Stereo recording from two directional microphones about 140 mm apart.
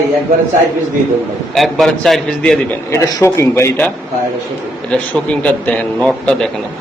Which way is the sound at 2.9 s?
20° left (ahead or behind).